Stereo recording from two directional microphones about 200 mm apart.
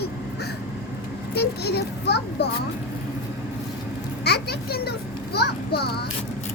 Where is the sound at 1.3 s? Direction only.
55° left (ahead or behind).